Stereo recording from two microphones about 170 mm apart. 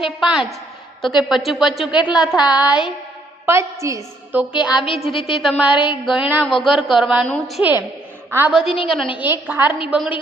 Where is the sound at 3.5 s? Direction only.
15° right (ahead or behind).